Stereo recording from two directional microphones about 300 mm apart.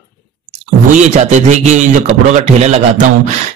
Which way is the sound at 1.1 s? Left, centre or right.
Right.